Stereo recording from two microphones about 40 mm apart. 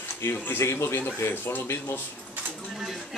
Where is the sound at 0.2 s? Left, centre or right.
Left.